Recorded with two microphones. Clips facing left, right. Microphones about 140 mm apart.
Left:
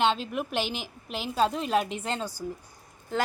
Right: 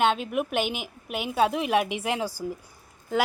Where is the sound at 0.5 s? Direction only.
55° right (ahead or behind).